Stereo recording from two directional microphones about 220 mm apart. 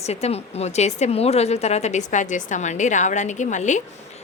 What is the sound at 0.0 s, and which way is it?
A woman's voice, 30° left (ahead or behind).